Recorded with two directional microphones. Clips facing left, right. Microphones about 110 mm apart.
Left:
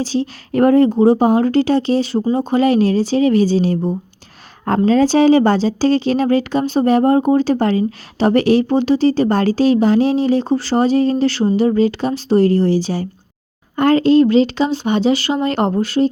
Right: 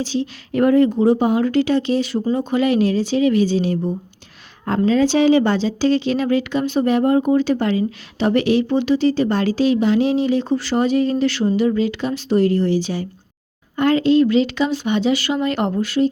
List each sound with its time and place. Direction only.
0.0 s speech: 35° left (ahead or behind)